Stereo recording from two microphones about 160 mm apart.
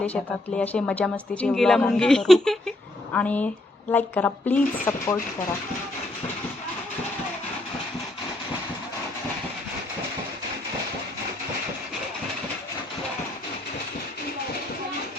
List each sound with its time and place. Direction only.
0.0 s speech: 10° left (ahead or behind)